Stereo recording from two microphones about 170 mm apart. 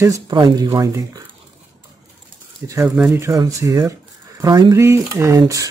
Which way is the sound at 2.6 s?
15° right (ahead or behind).